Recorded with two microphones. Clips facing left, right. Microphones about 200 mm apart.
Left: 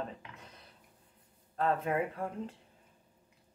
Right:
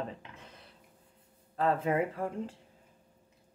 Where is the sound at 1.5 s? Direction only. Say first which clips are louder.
Right 2 dB; 30° right (ahead or behind).